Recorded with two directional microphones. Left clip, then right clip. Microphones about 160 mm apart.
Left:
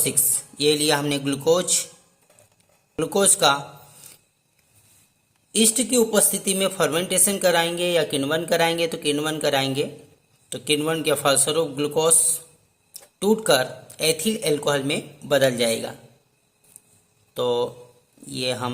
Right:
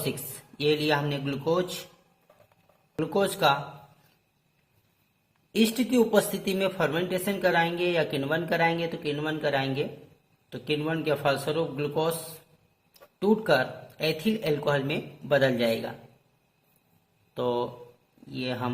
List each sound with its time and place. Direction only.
0.5 s a woman's voice: 30° left (ahead or behind)
3.0 s a woman's voice: 35° left (ahead or behind)
5.5 s a woman's voice: 20° left (ahead or behind)
13.1 s a woman's voice: 35° left (ahead or behind)
17.3 s a woman's voice: 30° left (ahead or behind)